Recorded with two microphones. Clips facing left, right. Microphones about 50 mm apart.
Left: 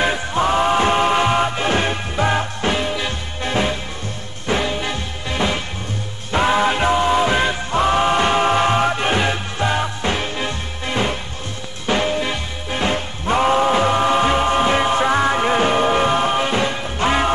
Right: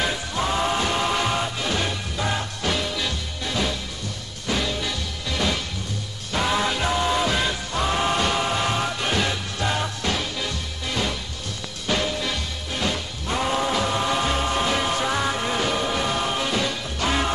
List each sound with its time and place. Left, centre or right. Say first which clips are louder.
0.0 s music: left 7 dB; left